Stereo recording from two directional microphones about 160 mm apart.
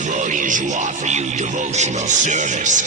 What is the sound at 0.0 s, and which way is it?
Speech, 50° right (ahead or behind).